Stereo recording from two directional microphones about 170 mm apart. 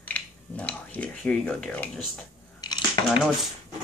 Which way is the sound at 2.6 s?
25° left (ahead or behind).